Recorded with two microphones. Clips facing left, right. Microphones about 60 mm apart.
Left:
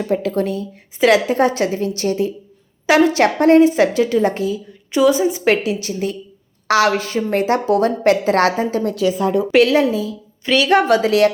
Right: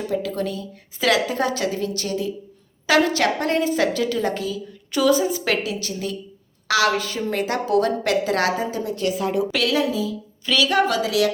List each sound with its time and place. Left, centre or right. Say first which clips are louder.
0.1 s a woman's voice: left 7 dB; left
9.5 s a woman's voice: left 8 dB; left